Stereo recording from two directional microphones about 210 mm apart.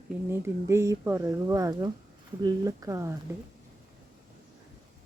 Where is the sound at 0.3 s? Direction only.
10° right (ahead or behind).